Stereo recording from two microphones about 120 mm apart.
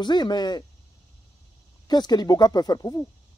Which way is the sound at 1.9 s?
35° left (ahead or behind).